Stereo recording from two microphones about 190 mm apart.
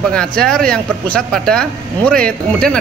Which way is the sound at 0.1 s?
5° left (ahead or behind).